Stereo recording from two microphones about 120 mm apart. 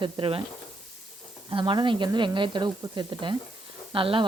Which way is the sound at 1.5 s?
45° right (ahead or behind).